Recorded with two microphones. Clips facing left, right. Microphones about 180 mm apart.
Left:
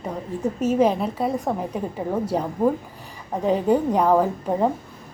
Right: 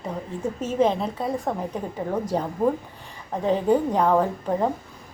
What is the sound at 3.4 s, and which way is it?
A woman's voice, 5° left (ahead or behind).